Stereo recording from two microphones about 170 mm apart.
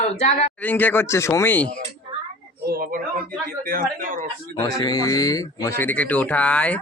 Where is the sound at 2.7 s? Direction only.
60° right (ahead or behind).